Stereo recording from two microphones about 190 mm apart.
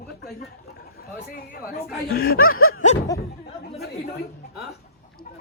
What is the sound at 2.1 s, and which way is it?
Speech, 50° left (ahead or behind).